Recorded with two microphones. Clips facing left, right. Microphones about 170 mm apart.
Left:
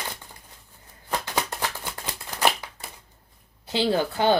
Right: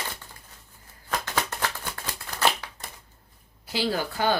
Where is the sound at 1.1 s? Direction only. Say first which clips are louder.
Left 1 dB; 15° left (ahead or behind).